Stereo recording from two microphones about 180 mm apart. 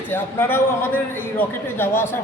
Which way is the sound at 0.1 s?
10° left (ahead or behind).